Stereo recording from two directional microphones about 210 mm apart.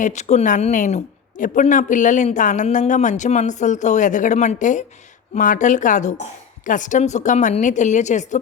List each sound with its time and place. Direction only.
0.0 s a woman's voice: 35° left (ahead or behind)